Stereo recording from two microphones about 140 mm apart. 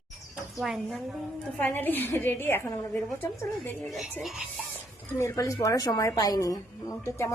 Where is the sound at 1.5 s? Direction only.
15° left (ahead or behind).